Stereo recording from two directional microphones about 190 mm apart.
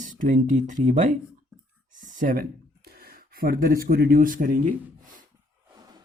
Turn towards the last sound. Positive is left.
turn(degrees=-45)  # may be behind; listen again after turning